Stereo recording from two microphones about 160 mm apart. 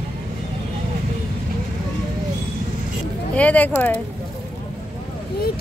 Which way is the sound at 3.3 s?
10° left (ahead or behind).